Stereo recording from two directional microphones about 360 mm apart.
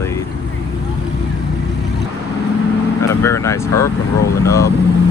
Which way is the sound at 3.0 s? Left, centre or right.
Centre.